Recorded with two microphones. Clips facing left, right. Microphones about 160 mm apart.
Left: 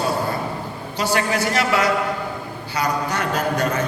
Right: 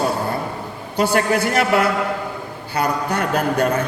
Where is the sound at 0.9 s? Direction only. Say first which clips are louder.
Right 4 dB; 55° right (ahead or behind).